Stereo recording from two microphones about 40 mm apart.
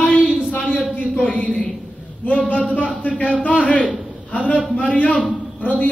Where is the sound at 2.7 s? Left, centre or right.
Left.